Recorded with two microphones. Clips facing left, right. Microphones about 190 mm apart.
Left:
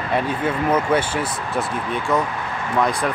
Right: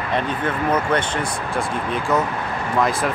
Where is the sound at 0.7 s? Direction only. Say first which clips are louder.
Left 1 dB; 5° left (ahead or behind).